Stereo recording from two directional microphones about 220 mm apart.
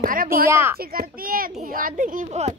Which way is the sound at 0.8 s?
40° right (ahead or behind).